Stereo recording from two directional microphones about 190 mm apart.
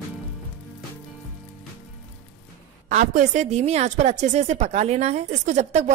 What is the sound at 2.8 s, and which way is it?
A woman's voice, 45° right (ahead or behind).